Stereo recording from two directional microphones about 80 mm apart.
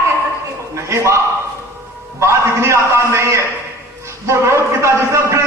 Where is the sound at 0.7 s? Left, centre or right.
Right.